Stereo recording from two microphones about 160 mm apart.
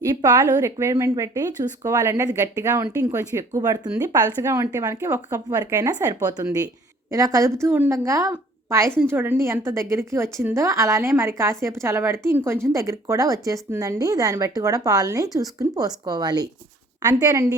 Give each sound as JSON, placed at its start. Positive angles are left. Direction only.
{"t": 0.0, "sound": "a woman's voice", "side_deg": -20}